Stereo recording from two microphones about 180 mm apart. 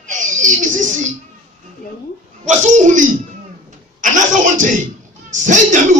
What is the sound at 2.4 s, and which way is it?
Speech, 40° right (ahead or behind).